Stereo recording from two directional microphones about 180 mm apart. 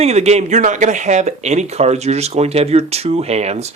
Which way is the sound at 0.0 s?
35° right (ahead or behind).